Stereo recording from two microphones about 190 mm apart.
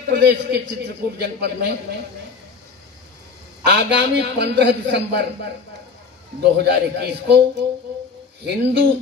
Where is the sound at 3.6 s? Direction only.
65° right (ahead or behind).